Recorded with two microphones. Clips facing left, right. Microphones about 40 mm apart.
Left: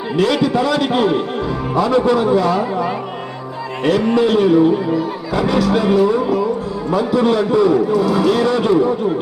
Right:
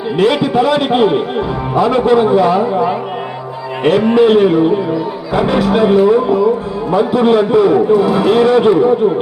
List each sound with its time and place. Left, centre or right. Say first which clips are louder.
0.2 s a man's voice: right 3 dB; right